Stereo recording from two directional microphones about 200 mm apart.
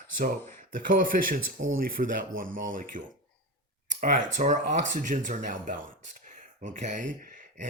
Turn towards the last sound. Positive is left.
turn(degrees=-40)  # may be behind; listen again after turning